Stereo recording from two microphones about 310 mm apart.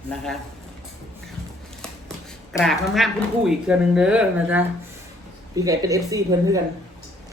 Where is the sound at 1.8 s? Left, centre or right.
Centre.